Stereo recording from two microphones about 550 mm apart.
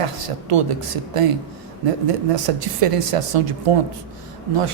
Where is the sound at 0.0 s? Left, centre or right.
Right.